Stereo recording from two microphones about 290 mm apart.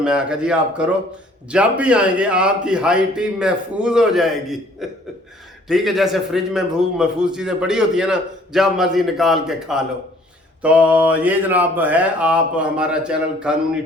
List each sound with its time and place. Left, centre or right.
0.0 s a man's voice: centre